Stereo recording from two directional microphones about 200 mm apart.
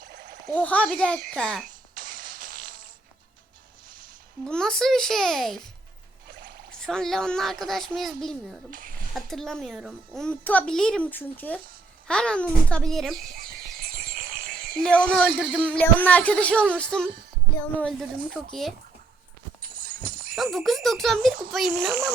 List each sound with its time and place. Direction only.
0.0 s splash: 55° right (ahead or behind)
0.5 s a child's voice: 5° left (ahead or behind)
1.6 s fart: 45° right (ahead or behind)
4.4 s a child's voice: 5° left (ahead or behind)
6.2 s a sound: 60° right (ahead or behind)
6.7 s a child's voice: 5° left (ahead or behind)
8.7 s a sound: 45° right (ahead or behind)
9.1 s a child's voice: centre (ahead or behind)
13.1 s a sound: 45° right (ahead or behind)
14.8 s a child's voice: 5° left (ahead or behind)
20.3 s a child's voice: centre (ahead or behind)